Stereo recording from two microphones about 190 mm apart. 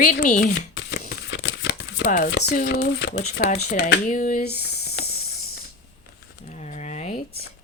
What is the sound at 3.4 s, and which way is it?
Speech, 45° left (ahead or behind).